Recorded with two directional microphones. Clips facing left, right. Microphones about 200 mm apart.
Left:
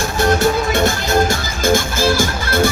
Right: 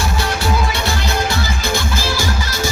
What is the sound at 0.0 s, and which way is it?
Music, 45° left (ahead or behind).